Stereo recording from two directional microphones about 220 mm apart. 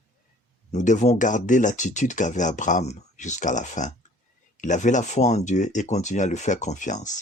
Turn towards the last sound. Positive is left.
turn(degrees=35)  # may be behind; listen again after turning